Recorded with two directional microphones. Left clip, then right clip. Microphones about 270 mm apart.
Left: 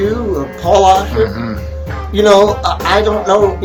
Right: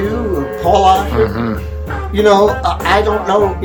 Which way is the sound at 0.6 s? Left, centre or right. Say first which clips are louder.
Left 1 dB; centre.